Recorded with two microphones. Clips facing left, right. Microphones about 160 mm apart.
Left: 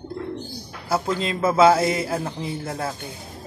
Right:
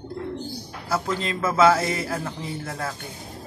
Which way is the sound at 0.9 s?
15° left (ahead or behind).